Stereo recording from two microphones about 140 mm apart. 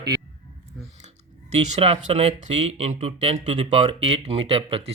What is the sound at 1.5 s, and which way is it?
A man's voice, 45° right (ahead or behind).